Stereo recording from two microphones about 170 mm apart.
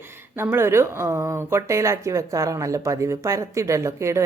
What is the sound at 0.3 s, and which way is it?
Speech, 15° right (ahead or behind).